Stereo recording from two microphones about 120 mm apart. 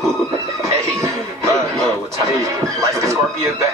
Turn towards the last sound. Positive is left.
turn(degrees=-25)  # may be behind; listen again after turning